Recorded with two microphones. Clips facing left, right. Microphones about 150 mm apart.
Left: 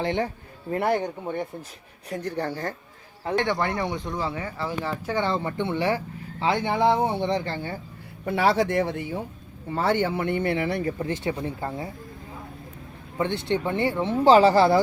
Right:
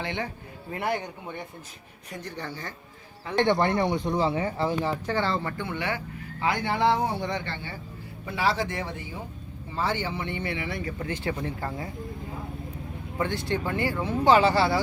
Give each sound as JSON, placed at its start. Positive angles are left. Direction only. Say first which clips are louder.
{"t": 0.0, "sound": "speech", "louder": "left 6 dB", "side_deg": 40}
{"t": 3.3, "sound": "speech", "louder": "right 2 dB", "side_deg": -25}
{"t": 5.0, "sound": "speech", "louder": "left 2 dB", "side_deg": 15}
{"t": 8.2, "sound": "speech", "louder": "left 5 dB", "side_deg": 60}
{"t": 11.2, "sound": "speech", "louder": "left 2 dB", "side_deg": 20}
{"t": 13.1, "sound": "speech", "louder": "left 3 dB", "side_deg": 20}